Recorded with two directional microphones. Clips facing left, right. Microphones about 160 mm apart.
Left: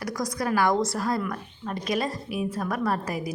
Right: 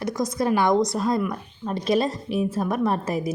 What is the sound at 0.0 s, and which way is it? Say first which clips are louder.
A woman's voice: right 5 dB; 25° right (ahead or behind).